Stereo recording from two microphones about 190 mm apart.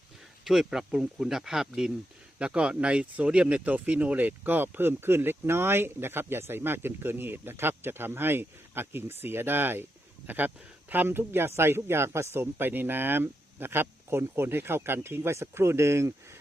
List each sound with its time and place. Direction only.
0.4 s speech: 5° right (ahead or behind)